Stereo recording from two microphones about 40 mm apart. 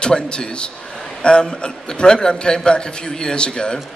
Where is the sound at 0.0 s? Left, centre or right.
Left.